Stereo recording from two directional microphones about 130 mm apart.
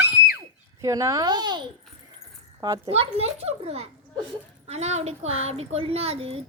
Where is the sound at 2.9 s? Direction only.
50° right (ahead or behind).